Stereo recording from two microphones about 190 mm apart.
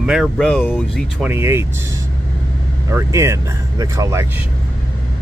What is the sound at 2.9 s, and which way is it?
Speech, 15° right (ahead or behind).